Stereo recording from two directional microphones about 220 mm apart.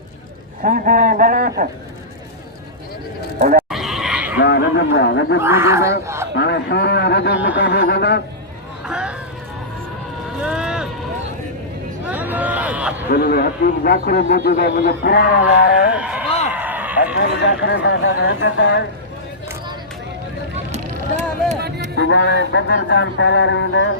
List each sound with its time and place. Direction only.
0.6 s speech: 35° right (ahead or behind)
3.3 s speech: 35° right (ahead or behind)
3.7 s neigh: centre (ahead or behind)
4.4 s speech: 50° left (ahead or behind)
5.4 s speech: 10° right (ahead or behind)
6.3 s a man's voice: 50° left (ahead or behind)
8.9 s vehicle: 5° right (ahead or behind)
10.4 s boat: centre (ahead or behind)
12.0 s a sound: 5° right (ahead or behind)
13.1 s a man's voice: 40° left (ahead or behind)
16.0 s a sound: 5° right (ahead or behind)
17.2 s a man's voice: 50° left (ahead or behind)
21.9 s speech: 55° left (ahead or behind)